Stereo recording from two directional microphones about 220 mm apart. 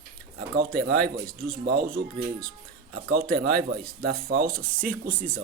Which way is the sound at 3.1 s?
40° right (ahead or behind).